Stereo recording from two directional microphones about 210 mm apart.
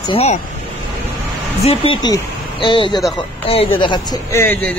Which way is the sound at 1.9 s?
20° left (ahead or behind).